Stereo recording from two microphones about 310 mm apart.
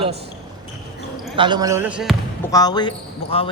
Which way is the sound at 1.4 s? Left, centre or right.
Centre.